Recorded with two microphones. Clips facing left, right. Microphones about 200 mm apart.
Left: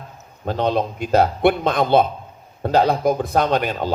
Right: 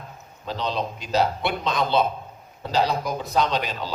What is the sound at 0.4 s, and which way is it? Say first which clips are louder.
A man's voice: left 7 dB; 55° left (ahead or behind).